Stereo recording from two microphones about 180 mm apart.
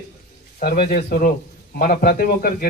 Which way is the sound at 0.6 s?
55° left (ahead or behind).